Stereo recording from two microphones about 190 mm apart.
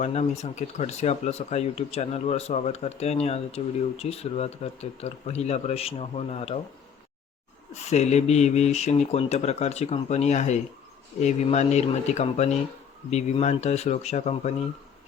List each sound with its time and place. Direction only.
0.0 s speech: 35° left (ahead or behind)
7.7 s speech: 35° left (ahead or behind)